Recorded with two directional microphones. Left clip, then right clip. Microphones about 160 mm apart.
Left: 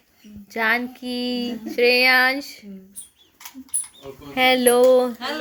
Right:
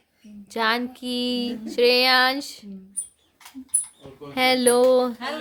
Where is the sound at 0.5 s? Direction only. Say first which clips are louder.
Left 2 dB; 15° right (ahead or behind).